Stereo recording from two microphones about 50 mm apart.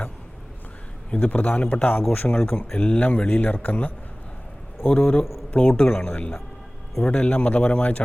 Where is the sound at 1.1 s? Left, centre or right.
Left.